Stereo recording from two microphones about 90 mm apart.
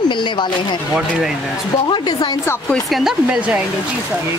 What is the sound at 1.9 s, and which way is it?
Speech, 60° left (ahead or behind).